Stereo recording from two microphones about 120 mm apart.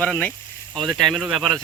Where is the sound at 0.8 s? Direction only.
Centre (ahead or behind).